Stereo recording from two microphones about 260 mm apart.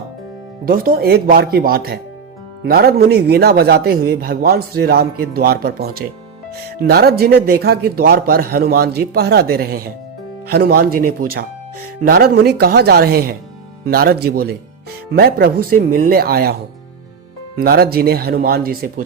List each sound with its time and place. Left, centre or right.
0.6 s a man's voice: right
17.6 s a man's voice: right